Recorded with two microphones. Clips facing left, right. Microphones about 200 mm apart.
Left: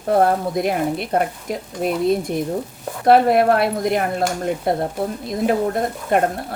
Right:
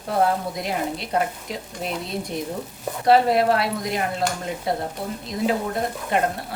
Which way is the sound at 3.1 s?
55° left (ahead or behind).